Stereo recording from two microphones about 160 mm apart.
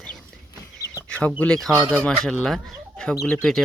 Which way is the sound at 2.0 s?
5° left (ahead or behind).